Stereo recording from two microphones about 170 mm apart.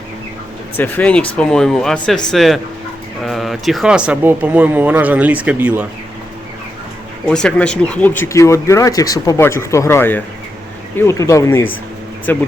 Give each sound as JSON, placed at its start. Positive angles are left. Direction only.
{"t": 0.8, "sound": "speech", "side_deg": 10}
{"t": 7.3, "sound": "speech", "side_deg": 5}